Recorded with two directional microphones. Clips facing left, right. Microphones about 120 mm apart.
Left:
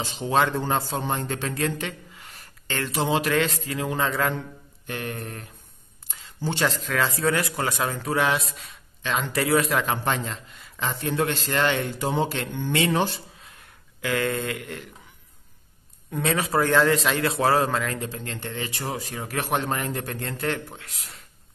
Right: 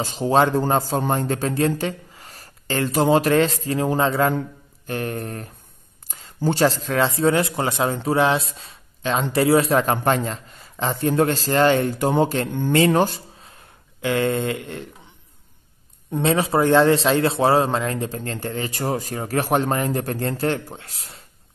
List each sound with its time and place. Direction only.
0.0 s a man's voice: 40° right (ahead or behind)
16.1 s a man's voice: 25° right (ahead or behind)
18.1 s a man's voice: 40° right (ahead or behind)